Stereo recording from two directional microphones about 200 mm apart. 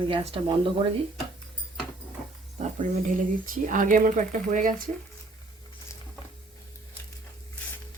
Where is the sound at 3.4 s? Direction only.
40° right (ahead or behind).